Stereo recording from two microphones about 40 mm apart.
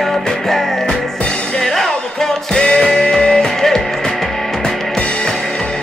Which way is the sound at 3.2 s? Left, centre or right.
Left.